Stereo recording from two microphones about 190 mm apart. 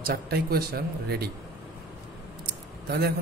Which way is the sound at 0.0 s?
55° right (ahead or behind).